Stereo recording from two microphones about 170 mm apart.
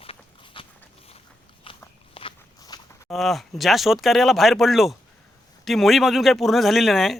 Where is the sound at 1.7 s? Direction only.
30° left (ahead or behind).